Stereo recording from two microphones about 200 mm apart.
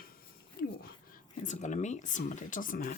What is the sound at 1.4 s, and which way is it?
Speech, 35° left (ahead or behind).